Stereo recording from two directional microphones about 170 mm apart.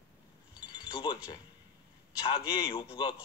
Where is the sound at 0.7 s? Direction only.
30° left (ahead or behind).